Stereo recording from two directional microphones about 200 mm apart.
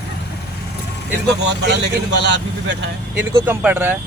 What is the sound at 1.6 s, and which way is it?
Speech, 60° right (ahead or behind).